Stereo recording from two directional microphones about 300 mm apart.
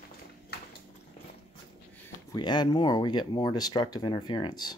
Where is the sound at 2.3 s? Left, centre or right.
Centre.